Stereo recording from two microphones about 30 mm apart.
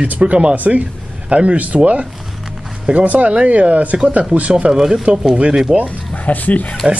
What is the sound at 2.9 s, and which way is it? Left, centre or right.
Speech, right.